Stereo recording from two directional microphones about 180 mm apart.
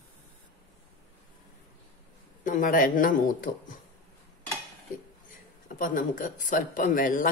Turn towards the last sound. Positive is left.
turn(degrees=50)  # may be behind; listen again after turning